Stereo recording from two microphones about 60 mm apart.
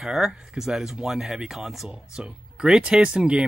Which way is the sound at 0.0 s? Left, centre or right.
Centre.